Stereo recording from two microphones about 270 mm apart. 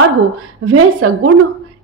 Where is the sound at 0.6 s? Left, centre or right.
Right.